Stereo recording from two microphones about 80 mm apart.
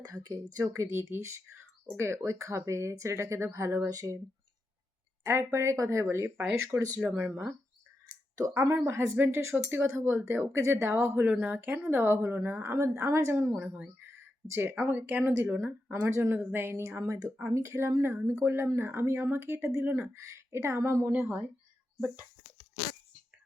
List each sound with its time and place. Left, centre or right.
0.1 s speech: right
0.9 s speech: right
5.2 s speech: right
7.0 s speech: centre
8.4 s a woman's voice: right
11.3 s a woman's voice: centre; by 13.3 s right
13.6 s speech: centre
13.8 s a sound: right
15.5 s a woman's voice: right
17.0 s speech: right
18.2 s a woman's voice: right
21.1 s a woman's voice: right